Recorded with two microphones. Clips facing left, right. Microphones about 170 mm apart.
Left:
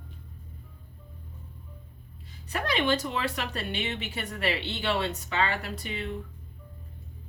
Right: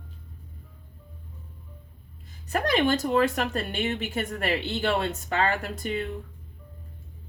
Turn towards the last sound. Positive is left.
turn(degrees=-45)  # may be behind; listen again after turning